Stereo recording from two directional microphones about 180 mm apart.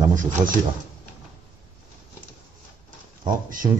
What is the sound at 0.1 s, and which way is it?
Speech, 45° right (ahead or behind).